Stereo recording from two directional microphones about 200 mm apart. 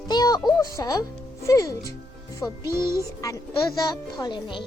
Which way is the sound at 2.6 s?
15° right (ahead or behind).